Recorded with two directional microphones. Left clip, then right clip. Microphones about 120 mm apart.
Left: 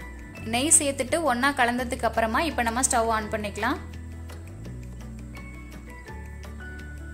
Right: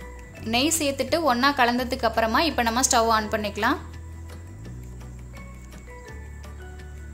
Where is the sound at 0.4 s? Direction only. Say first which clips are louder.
Right 1 dB; 5° right (ahead or behind).